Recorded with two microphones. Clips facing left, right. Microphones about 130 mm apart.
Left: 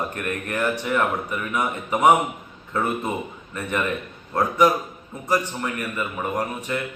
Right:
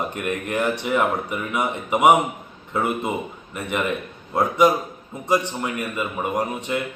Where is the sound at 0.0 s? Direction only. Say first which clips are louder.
Right 2 dB; 20° right (ahead or behind).